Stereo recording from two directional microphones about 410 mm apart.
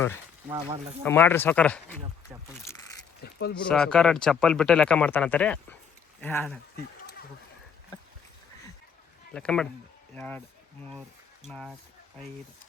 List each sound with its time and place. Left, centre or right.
0.4 s speech: centre
1.0 s speech: centre
3.2 s speech: left
3.7 s speech: centre
9.3 s speech: centre
11.4 s speech: centre